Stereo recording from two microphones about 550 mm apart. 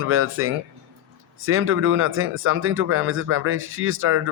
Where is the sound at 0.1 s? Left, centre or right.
Right.